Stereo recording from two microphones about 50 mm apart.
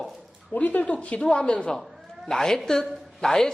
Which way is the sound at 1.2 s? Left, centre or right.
Centre.